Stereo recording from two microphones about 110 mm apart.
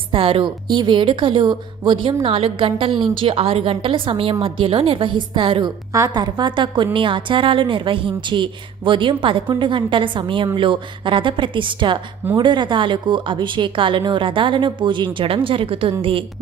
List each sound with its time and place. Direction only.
0.1 s a woman's voice: 55° right (ahead or behind)
5.9 s a woman's voice: 35° right (ahead or behind); by 16.2 s 55° right (ahead or behind)